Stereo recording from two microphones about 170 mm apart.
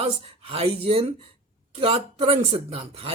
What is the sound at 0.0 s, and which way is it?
Speech, 35° right (ahead or behind).